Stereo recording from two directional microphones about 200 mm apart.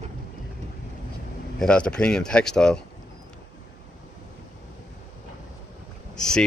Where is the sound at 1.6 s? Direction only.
5° left (ahead or behind).